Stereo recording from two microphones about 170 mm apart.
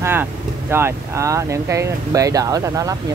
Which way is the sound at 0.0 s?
15° right (ahead or behind).